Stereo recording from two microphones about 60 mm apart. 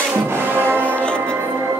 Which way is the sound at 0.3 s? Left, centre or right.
Right.